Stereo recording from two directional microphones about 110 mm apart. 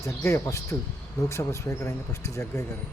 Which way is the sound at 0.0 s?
25° left (ahead or behind).